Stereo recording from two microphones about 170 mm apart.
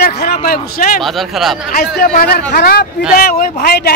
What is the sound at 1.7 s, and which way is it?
A man's voice, 65° left (ahead or behind).